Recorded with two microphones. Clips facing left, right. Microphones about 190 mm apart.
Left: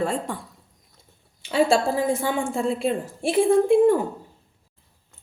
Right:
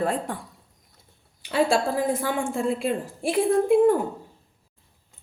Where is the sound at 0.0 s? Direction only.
5° right (ahead or behind).